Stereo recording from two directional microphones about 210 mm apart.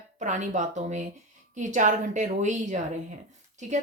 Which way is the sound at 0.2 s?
35° right (ahead or behind).